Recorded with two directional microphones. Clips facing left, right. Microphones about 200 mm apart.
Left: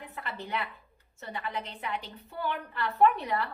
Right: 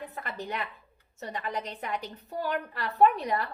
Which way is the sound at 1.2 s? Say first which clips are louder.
Right 2 dB; 40° right (ahead or behind).